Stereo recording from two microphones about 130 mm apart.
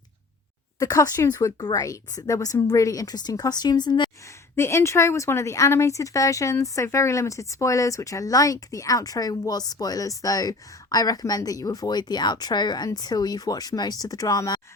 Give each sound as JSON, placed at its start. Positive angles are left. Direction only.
{"t": 0.8, "sound": "speech", "side_deg": 25}
{"t": 4.5, "sound": "speech", "side_deg": 20}